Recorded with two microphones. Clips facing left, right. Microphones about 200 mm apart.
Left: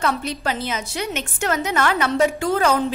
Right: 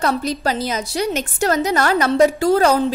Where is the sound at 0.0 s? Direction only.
40° right (ahead or behind).